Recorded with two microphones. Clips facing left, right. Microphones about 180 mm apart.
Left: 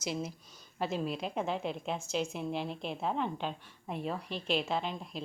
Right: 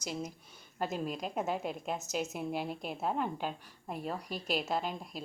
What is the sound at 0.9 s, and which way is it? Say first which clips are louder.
Speech: left 3 dB; 45° right (ahead or behind).